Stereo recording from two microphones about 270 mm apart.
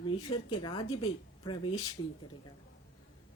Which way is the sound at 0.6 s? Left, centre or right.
Centre.